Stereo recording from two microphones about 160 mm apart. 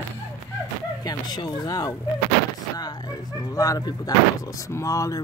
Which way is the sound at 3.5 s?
20° left (ahead or behind).